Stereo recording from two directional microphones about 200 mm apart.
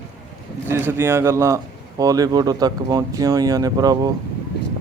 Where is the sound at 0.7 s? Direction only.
10° right (ahead or behind).